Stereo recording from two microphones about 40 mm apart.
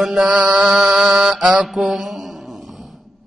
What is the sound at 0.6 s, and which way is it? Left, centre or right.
Mantra, centre.